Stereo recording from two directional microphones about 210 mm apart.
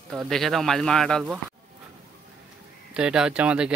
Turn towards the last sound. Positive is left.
turn(degrees=-5)  # may be behind; listen again after turning